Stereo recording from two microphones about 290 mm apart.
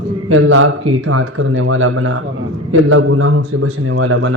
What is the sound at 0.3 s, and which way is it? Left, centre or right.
Speech, right.